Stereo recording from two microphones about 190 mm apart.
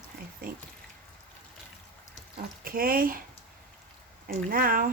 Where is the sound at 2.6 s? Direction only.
50° right (ahead or behind).